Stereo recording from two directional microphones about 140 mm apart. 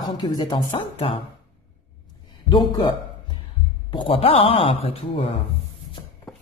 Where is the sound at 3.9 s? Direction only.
40° left (ahead or behind).